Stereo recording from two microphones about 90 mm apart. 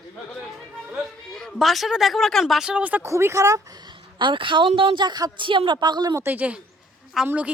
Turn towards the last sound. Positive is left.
turn(degrees=-15)  # may be behind; listen again after turning